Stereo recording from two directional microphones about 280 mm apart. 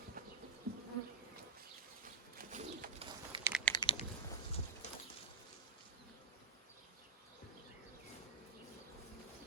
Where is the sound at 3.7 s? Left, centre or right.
Centre.